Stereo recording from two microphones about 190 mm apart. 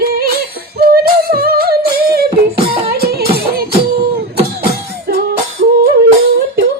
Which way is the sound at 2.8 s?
55° right (ahead or behind).